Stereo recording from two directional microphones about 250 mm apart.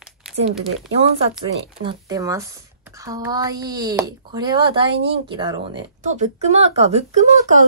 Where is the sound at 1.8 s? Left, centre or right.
Centre.